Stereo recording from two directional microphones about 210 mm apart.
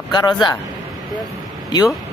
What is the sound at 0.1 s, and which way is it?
Speech, 20° left (ahead or behind).